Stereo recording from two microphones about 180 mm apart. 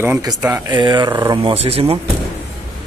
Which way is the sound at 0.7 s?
25° right (ahead or behind).